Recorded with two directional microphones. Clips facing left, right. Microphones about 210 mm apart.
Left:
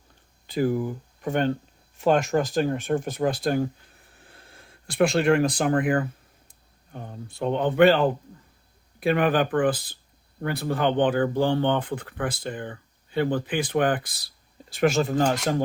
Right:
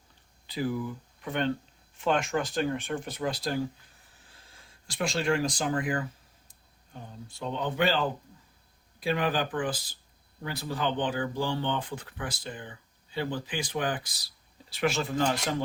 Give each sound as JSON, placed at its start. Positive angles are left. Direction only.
{"t": 0.4, "sound": "speech", "side_deg": 50}
{"t": 4.1, "sound": "a sound", "side_deg": 60}
{"t": 6.5, "sound": "speech", "side_deg": 60}
{"t": 14.7, "sound": "speech", "side_deg": 45}